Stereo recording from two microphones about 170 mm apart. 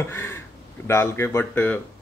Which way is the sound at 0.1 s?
15° left (ahead or behind).